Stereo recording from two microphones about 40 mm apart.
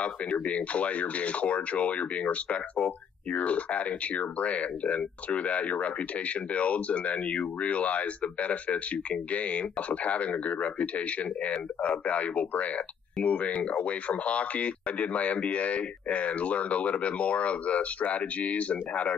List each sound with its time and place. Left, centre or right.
0.0 s speech: left